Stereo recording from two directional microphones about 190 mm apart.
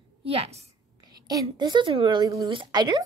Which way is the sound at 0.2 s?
30° right (ahead or behind).